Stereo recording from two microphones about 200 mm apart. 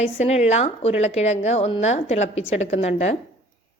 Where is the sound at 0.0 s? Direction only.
30° left (ahead or behind).